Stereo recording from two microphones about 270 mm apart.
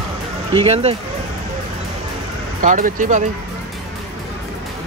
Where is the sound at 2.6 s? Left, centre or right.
Right.